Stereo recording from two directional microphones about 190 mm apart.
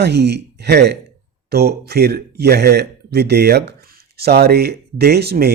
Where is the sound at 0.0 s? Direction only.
60° right (ahead or behind).